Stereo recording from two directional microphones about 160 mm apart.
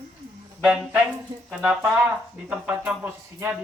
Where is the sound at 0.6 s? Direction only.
5° right (ahead or behind).